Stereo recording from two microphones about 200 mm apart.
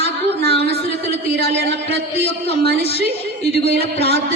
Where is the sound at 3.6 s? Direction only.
30° left (ahead or behind).